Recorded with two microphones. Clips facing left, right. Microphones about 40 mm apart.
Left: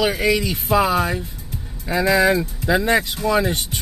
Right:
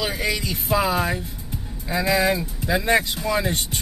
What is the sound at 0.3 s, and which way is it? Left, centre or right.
Speech, centre.